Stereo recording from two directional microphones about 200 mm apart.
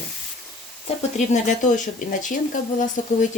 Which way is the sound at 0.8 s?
40° left (ahead or behind).